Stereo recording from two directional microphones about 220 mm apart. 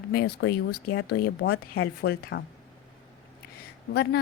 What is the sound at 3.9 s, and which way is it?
Speech, 45° left (ahead or behind).